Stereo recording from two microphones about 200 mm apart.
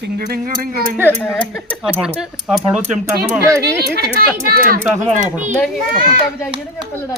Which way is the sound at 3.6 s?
55° right (ahead or behind).